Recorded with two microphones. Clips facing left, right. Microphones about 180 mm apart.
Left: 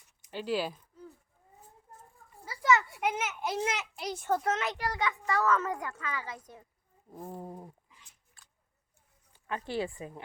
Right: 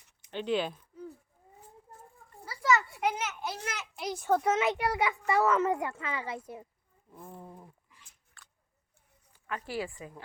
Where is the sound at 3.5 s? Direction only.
20° left (ahead or behind).